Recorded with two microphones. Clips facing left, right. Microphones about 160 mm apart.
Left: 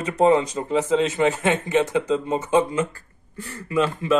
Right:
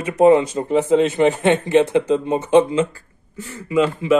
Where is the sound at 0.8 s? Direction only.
60° right (ahead or behind).